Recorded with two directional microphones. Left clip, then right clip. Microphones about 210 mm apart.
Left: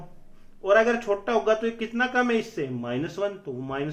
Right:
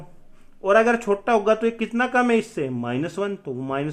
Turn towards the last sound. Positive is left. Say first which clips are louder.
# right 4 dB
turn(degrees=-55)  # may be behind; listen again after turning